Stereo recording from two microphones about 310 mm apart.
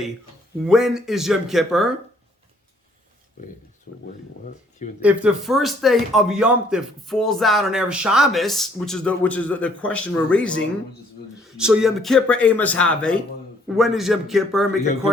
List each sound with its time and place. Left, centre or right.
0.6 s speech: centre
3.9 s speech: left
4.9 s speech: centre